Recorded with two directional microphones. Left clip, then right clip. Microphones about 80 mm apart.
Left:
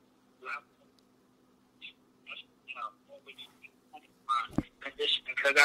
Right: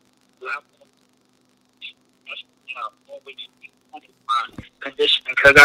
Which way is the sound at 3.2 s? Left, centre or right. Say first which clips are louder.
Right 11 dB; right.